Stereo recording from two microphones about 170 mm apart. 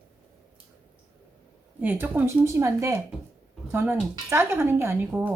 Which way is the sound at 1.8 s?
10° right (ahead or behind).